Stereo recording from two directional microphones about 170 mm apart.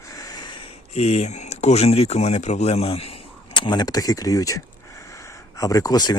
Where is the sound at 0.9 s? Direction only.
40° left (ahead or behind).